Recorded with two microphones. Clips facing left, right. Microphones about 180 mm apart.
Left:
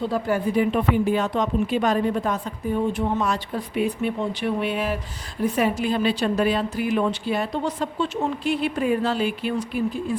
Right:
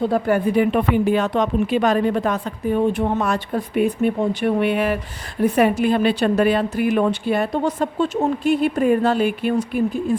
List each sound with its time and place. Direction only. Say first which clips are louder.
0.0 s a woman's voice: right 5 dB; 60° right (ahead or behind)